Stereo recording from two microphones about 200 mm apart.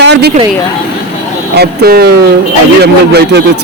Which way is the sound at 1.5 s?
50° right (ahead or behind).